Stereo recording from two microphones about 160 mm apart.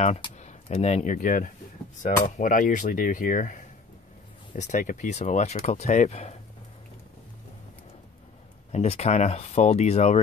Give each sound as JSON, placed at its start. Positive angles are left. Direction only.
{"t": 0.0, "sound": "speech", "side_deg": 40}
{"t": 8.7, "sound": "speech", "side_deg": 40}